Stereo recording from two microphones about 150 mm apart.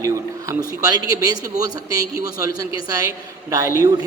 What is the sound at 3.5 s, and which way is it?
Speech, 20° right (ahead or behind).